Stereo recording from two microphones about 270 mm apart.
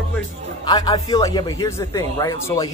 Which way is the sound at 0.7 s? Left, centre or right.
Centre.